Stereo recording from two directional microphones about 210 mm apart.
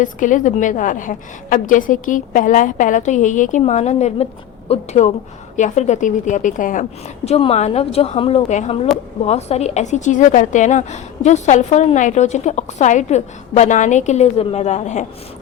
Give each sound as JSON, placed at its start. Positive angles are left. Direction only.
{"t": 0.0, "sound": "a woman's voice", "side_deg": 40}